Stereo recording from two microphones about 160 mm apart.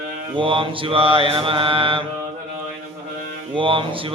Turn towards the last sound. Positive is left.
turn(degrees=-35)  # may be behind; listen again after turning